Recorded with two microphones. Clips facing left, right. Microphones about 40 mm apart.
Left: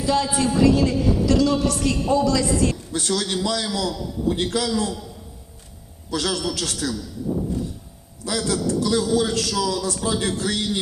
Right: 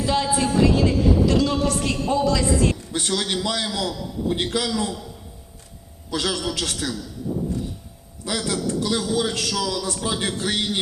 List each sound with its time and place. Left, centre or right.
0.0 s a woman's voice: right
6.1 s a woman's voice: right
8.3 s a woman's voice: right